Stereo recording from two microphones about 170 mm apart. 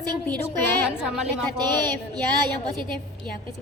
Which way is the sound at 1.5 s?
25° right (ahead or behind).